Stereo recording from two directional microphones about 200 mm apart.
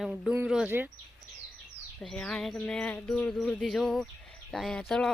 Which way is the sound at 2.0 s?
5° left (ahead or behind).